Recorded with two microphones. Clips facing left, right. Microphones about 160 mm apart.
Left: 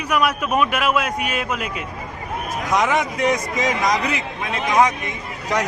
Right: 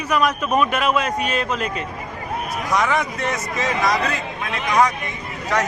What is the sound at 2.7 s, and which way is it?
A man's voice, 20° left (ahead or behind).